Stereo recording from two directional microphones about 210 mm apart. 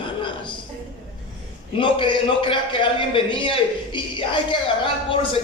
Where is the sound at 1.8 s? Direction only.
25° left (ahead or behind).